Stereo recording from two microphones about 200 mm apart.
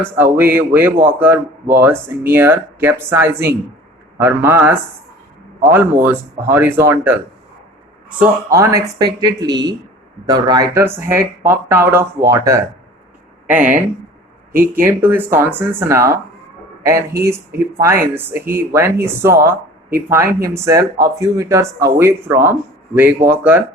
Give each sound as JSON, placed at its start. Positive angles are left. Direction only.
{"t": 0.2, "sound": "speech", "side_deg": -10}
{"t": 8.2, "sound": "speech", "side_deg": -15}
{"t": 14.5, "sound": "speech", "side_deg": -45}
{"t": 14.8, "sound": "speech", "side_deg": -10}